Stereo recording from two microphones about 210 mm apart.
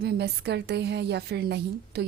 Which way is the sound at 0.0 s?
50° right (ahead or behind).